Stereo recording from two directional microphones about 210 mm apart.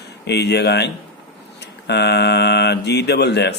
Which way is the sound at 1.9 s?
50° left (ahead or behind).